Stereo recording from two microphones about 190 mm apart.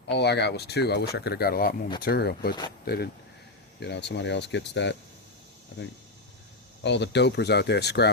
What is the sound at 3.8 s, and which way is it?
Speech, 65° left (ahead or behind).